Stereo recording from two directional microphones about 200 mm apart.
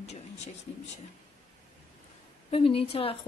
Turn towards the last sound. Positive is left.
turn(degrees=30)  # may be behind; listen again after turning